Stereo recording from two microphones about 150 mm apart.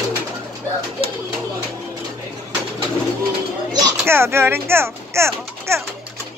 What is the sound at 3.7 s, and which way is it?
Speech, 20° right (ahead or behind).